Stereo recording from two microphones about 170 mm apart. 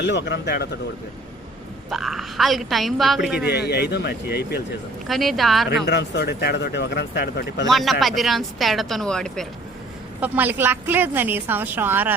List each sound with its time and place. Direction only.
0.0 s a man's voice: 90° left; by 0.7 s 70° left (ahead or behind)
1.9 s speech: centre (ahead or behind)
3.4 s speech: 75° left (ahead or behind)
5.0 s speech: centre (ahead or behind)
5.8 s speech: 75° left (ahead or behind)
7.7 s speech: centre (ahead or behind)
10.2 s a woman's voice: 10° right (ahead or behind)